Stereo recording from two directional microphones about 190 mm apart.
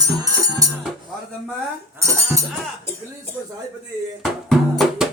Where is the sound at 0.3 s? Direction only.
20° right (ahead or behind).